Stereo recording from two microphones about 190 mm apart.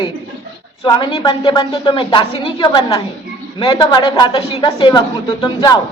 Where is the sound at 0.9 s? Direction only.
25° left (ahead or behind).